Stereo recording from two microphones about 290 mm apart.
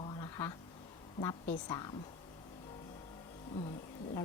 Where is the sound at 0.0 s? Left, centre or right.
Centre.